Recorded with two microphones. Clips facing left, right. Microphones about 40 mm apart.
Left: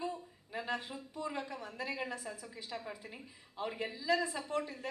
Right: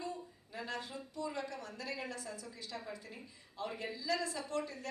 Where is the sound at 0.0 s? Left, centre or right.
Centre.